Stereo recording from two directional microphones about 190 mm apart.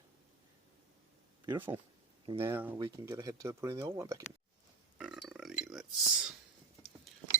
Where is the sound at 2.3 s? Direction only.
10° right (ahead or behind).